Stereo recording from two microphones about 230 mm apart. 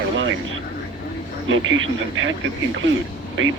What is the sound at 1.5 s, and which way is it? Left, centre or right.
Speech, right.